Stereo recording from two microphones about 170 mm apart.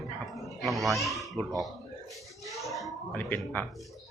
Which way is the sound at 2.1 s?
Centre (ahead or behind).